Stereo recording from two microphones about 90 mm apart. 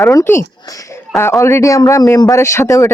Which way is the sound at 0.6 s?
40° left (ahead or behind).